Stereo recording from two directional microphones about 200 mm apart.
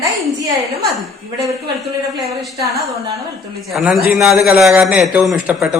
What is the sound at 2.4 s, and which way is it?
A man's voice, centre (ahead or behind).